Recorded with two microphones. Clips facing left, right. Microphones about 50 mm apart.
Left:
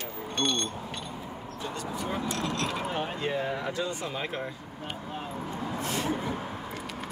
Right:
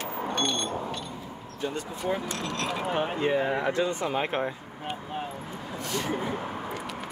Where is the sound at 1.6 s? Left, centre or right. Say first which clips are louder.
Right 3 dB; right.